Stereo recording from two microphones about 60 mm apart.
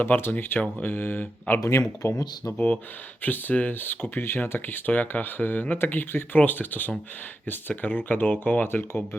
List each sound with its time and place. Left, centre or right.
0.0 s speech: left
2.0 s speech: left
2.5 s speech: left